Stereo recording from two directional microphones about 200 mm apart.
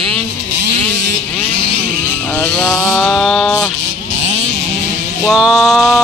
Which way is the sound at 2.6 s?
5° left (ahead or behind).